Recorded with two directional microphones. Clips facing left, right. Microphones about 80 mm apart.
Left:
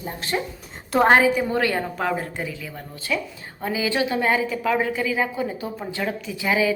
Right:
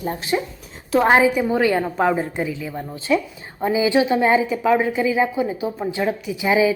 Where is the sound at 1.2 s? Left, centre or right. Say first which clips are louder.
Right 3 dB; centre.